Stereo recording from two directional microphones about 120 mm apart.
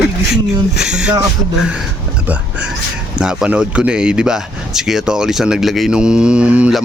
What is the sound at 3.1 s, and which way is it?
Speech, 10° right (ahead or behind).